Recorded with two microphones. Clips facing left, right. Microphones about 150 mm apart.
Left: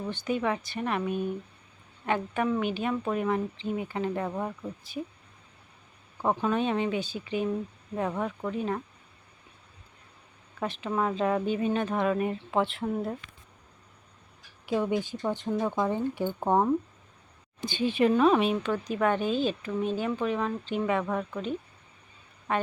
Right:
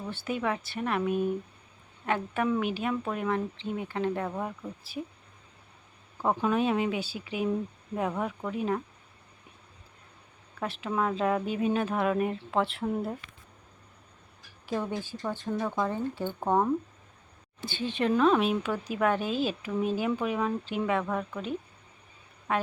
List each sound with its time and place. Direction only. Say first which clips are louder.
0.1 s speech: left 2 dB; 5° right (ahead or behind)
6.2 s speech: even; 5° right (ahead or behind)
10.6 s speech: left 1 dB; centre (ahead or behind)
14.7 s speech: left 4 dB; 15° left (ahead or behind); by 22.6 s centre (ahead or behind)